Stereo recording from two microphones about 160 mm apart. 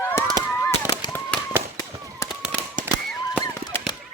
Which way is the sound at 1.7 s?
20° left (ahead or behind).